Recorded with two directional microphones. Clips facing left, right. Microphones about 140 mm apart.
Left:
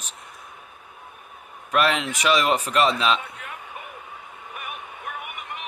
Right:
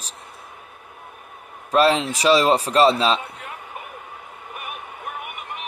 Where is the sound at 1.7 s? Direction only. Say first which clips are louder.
Right 5 dB; 30° right (ahead or behind).